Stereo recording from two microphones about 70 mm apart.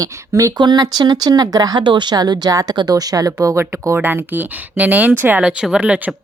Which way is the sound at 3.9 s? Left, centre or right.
Right.